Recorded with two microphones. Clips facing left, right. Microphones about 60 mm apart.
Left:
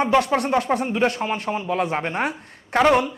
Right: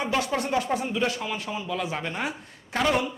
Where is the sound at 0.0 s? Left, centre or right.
Left.